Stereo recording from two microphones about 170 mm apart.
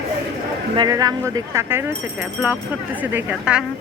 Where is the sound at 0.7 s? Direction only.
25° right (ahead or behind).